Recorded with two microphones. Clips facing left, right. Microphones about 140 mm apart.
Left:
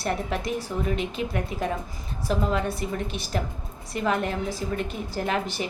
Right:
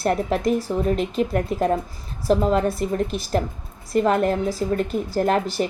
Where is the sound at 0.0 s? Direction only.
40° right (ahead or behind).